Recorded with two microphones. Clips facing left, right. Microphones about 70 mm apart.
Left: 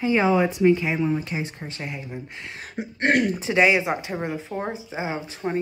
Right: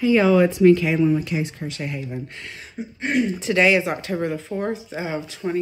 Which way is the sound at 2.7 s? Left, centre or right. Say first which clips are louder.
Left 3 dB; left.